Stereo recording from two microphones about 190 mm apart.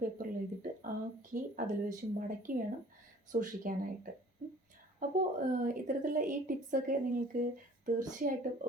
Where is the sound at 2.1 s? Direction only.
45° right (ahead or behind).